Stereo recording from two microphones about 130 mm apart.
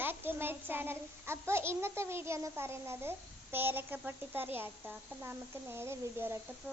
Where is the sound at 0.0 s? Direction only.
15° right (ahead or behind).